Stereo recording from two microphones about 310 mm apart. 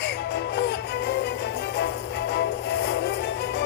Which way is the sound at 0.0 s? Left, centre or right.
Left.